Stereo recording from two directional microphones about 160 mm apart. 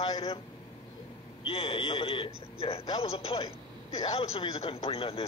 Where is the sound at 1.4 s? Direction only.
35° left (ahead or behind).